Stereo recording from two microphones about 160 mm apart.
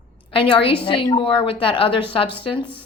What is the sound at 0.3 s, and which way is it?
A woman's voice, 35° left (ahead or behind).